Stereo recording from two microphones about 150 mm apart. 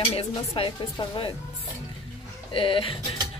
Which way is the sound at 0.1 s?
35° left (ahead or behind).